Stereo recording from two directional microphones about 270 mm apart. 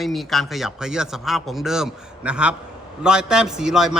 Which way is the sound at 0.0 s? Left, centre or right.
Centre.